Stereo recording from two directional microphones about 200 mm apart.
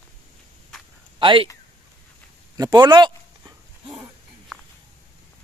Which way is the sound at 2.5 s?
20° right (ahead or behind).